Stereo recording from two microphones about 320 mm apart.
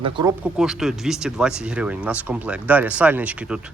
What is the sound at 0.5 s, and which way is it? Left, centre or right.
Speech, centre.